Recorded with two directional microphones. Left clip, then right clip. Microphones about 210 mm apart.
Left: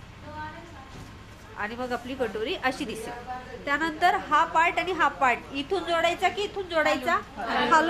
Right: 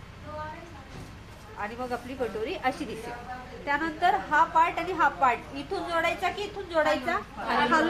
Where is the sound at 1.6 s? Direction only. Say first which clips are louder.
Left 2 dB; 20° left (ahead or behind).